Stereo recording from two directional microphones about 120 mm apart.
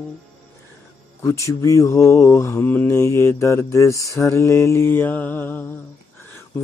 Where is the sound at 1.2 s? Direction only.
25° left (ahead or behind).